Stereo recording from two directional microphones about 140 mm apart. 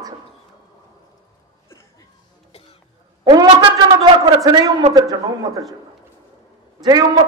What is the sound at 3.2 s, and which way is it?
A man's voice, 30° right (ahead or behind).